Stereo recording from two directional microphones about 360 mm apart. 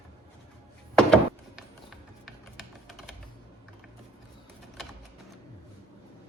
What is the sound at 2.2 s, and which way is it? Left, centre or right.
Music, centre.